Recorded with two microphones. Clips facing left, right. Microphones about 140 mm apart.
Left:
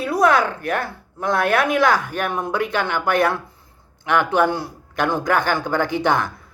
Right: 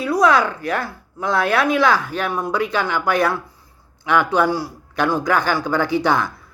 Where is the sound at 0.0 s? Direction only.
55° left (ahead or behind).